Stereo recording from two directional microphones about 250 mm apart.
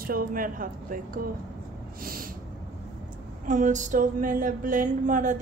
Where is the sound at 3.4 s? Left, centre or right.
Right.